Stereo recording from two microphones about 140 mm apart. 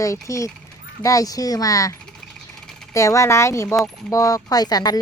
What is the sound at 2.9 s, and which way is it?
Speech, 20° left (ahead or behind).